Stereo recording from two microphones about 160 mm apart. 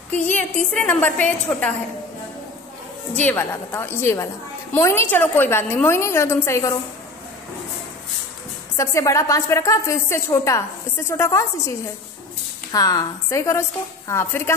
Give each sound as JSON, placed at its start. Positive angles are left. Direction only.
{"t": 0.1, "sound": "a woman's voice", "side_deg": 10}
{"t": 3.2, "sound": "a woman's voice", "side_deg": 10}
{"t": 8.7, "sound": "a woman's voice", "side_deg": 20}
{"t": 12.7, "sound": "a woman's voice", "side_deg": 20}